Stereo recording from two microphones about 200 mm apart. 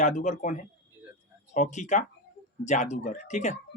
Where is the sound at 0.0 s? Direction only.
35° left (ahead or behind).